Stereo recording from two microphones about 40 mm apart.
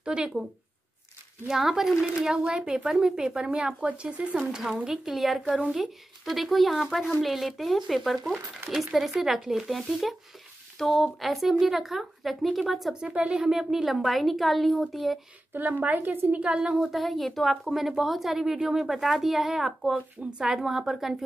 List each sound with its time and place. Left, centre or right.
0.0 s speech: right
1.5 s speech: centre
2.2 s speech: centre
3.3 s speech: right
4.5 s a woman's voice: centre
7.2 s a woman's voice: centre
13.0 s speech: right
13.5 s a woman's voice: centre
15.5 s speech: right
16.4 s speech: right
16.7 s a woman's voice: centre
19.9 s speech: right
20.4 s speech: centre